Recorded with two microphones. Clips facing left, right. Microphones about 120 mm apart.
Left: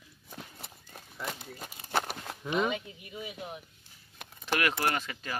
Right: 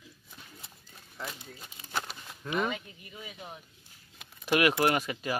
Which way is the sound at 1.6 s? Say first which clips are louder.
Left 5 dB; 55° left (ahead or behind).